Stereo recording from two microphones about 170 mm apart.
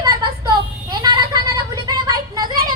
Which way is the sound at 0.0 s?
25° right (ahead or behind).